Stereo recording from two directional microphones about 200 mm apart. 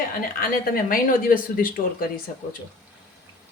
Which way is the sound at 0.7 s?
45° left (ahead or behind).